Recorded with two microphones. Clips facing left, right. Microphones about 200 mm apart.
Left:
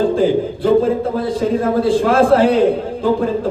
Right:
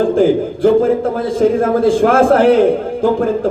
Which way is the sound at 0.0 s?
50° right (ahead or behind).